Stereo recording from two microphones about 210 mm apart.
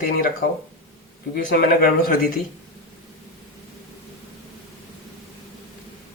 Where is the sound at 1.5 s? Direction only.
45° left (ahead or behind).